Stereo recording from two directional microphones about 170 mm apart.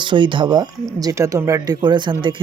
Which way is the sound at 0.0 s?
30° right (ahead or behind).